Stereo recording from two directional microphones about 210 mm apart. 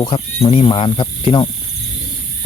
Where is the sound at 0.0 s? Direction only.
25° left (ahead or behind).